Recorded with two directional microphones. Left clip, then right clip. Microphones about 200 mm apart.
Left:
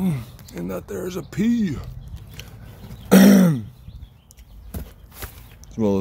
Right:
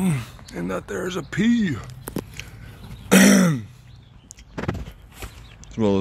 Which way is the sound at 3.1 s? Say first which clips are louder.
Left 1 dB; 25° left (ahead or behind).